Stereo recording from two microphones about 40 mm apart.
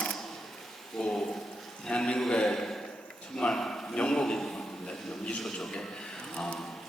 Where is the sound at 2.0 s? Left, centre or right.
Centre.